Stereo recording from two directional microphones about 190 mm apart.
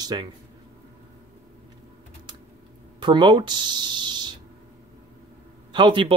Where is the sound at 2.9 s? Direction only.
25° right (ahead or behind).